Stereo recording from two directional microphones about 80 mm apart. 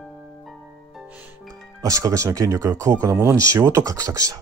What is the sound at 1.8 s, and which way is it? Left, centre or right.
Speech, right.